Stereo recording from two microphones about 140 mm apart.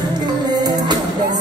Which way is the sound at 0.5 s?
30° right (ahead or behind).